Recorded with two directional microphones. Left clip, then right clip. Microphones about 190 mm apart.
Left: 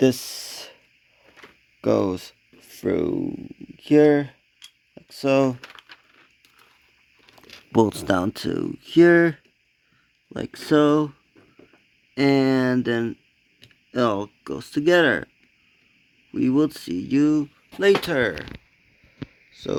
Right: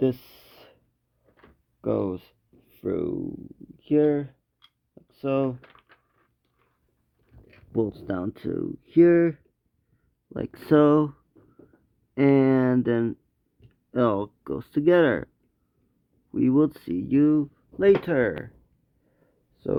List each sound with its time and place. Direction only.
0.0 s a sound: 40° left (ahead or behind)
1.8 s speech: 35° left (ahead or behind)
7.7 s speech: 45° left (ahead or behind)
10.2 s speech: 20° left (ahead or behind)
16.3 s speech: 15° left (ahead or behind)